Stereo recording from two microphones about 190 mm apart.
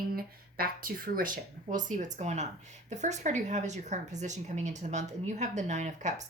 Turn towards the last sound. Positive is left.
turn(degrees=-40)  # may be behind; listen again after turning